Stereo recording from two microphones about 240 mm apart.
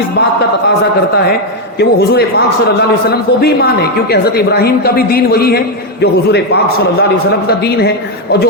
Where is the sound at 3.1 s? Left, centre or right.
Left.